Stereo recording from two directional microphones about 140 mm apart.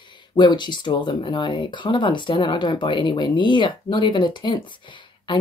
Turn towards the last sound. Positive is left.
turn(degrees=35)  # may be behind; listen again after turning